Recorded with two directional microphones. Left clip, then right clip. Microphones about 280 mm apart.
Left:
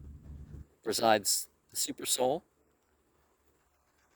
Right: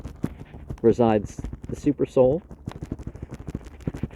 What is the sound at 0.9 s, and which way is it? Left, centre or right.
Speech, left.